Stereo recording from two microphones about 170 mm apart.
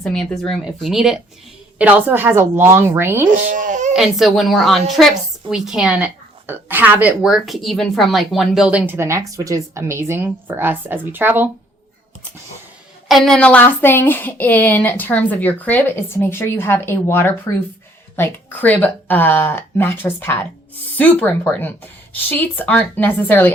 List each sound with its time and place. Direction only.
0.0 s a woman's voice: 5° left (ahead or behind); by 3.2 s 15° right (ahead or behind)
3.3 s baby cry: 50° right (ahead or behind)
3.9 s a woman's voice: centre (ahead or behind)
13.1 s a woman's voice: centre (ahead or behind)